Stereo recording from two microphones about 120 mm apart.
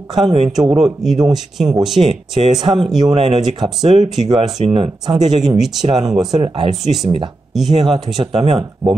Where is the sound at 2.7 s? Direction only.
40° right (ahead or behind).